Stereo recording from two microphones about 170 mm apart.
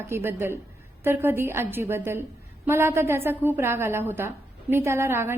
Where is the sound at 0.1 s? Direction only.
15° right (ahead or behind).